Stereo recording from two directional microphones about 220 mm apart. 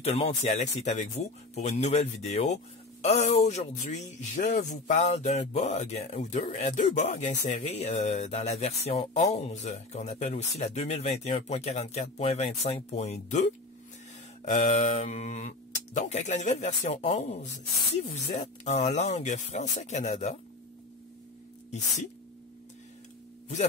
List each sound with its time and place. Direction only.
0.0 s speech: 25° left (ahead or behind)